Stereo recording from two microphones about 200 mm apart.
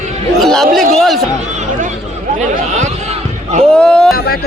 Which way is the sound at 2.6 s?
35° right (ahead or behind).